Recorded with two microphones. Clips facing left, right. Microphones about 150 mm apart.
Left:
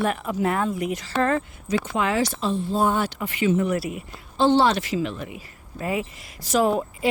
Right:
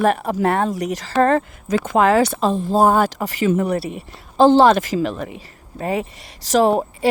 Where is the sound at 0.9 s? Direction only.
90° right.